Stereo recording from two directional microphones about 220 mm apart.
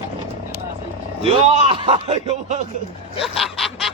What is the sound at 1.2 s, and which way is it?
A man's voice, 25° right (ahead or behind).